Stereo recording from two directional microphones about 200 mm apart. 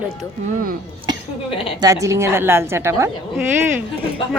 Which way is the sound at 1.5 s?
25° left (ahead or behind).